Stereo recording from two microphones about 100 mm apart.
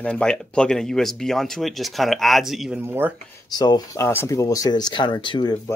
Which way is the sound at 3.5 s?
40° left (ahead or behind).